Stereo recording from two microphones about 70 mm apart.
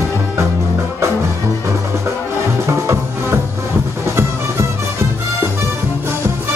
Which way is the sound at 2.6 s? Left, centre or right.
Right.